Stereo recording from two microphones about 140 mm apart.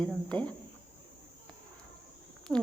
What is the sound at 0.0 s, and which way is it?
Speech, 10° left (ahead or behind).